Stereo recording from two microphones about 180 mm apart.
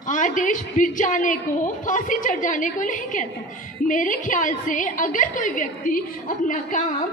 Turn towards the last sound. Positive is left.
turn(degrees=45)  # may be behind; listen again after turning